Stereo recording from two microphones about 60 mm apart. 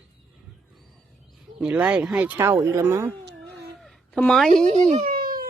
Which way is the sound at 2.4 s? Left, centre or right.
Right.